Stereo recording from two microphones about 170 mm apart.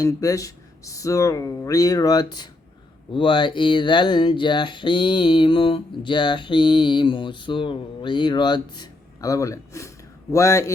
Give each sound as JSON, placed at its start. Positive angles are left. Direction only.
{"t": 0.0, "sound": "speech", "side_deg": 20}